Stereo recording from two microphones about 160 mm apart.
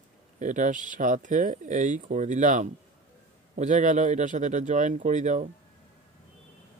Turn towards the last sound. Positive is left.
turn(degrees=-50)  # may be behind; listen again after turning